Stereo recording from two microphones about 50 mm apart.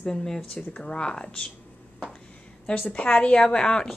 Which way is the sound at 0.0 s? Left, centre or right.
Centre.